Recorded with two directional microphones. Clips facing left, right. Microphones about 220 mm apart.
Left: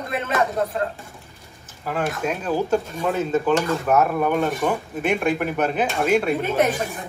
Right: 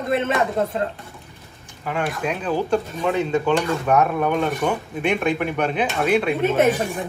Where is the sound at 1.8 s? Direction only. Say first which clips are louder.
Even; centre (ahead or behind).